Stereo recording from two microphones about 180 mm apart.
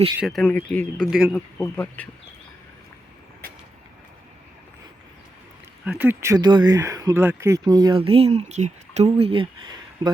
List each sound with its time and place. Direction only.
0.2 s speech: centre (ahead or behind)
5.8 s speech: 5° right (ahead or behind); by 10.1 s 25° right (ahead or behind)